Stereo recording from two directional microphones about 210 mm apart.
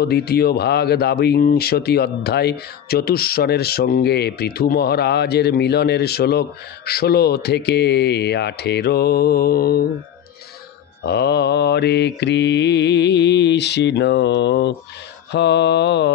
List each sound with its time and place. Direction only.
0.0 s speech: 50° left (ahead or behind)
11.1 s mantra: 50° left (ahead or behind)